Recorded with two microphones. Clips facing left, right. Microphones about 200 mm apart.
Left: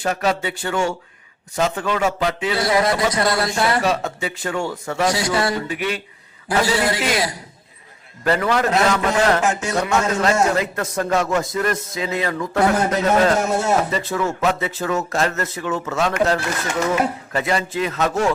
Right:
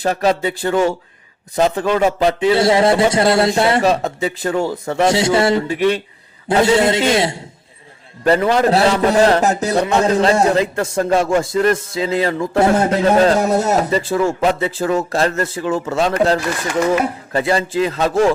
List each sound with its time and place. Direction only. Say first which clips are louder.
0.0 s a man's voice: right 5 dB; 35° right (ahead or behind)